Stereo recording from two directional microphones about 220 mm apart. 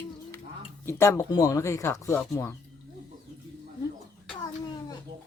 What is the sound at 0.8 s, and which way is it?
Speech, 10° left (ahead or behind).